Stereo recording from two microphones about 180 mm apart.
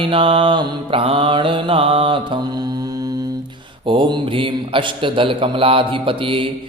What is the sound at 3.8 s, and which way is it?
Mantra, 25° right (ahead or behind).